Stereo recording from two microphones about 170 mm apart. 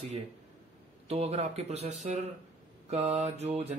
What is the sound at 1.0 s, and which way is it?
Speech, 35° right (ahead or behind).